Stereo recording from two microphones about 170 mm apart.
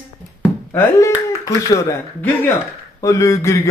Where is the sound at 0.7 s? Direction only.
15° left (ahead or behind).